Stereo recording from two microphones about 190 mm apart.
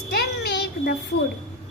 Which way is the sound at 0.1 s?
55° left (ahead or behind).